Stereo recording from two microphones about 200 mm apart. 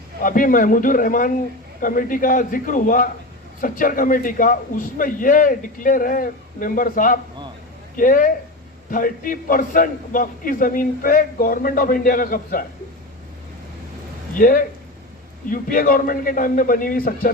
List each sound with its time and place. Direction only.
0.2 s a man's voice: 40° left (ahead or behind)
14.3 s a man's voice: 45° left (ahead or behind)